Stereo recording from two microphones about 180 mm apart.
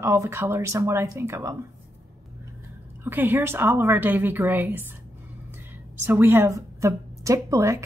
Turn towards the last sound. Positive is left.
turn(degrees=-15)  # may be behind; listen again after turning